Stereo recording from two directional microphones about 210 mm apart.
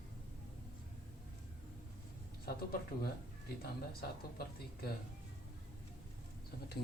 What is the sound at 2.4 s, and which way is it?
Speech, 45° left (ahead or behind).